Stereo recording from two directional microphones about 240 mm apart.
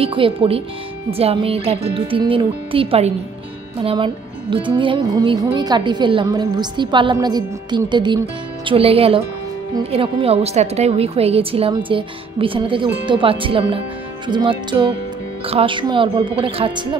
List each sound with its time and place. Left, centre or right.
0.0 s a woman's voice: right